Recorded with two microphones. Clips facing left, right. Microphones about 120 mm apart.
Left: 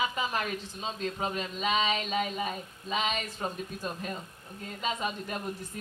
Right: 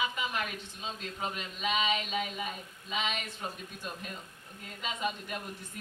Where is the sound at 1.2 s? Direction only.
35° left (ahead or behind).